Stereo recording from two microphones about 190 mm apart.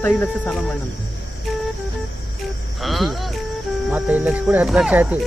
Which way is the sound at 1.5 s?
Centre (ahead or behind).